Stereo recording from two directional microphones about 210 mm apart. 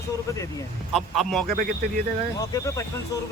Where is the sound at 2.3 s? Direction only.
15° left (ahead or behind).